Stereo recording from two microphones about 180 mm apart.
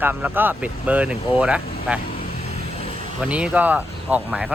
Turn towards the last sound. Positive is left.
turn(degrees=-10)  # may be behind; listen again after turning